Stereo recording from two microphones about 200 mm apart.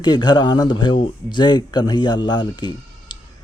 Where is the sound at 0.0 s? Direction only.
20° left (ahead or behind).